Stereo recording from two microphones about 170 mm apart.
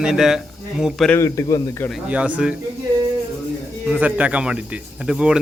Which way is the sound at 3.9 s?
10° right (ahead or behind).